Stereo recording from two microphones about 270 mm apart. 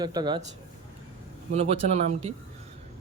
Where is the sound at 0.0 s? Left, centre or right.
Centre.